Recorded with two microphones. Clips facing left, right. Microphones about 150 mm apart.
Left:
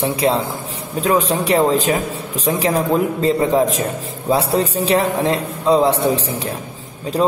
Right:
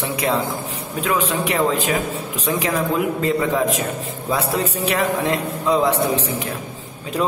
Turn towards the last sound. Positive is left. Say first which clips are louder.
# left 5 dB
turn(degrees=35)  # may be behind; listen again after turning